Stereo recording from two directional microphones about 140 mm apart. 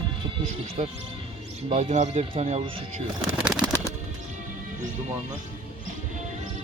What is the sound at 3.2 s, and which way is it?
Bird, 5° right (ahead or behind).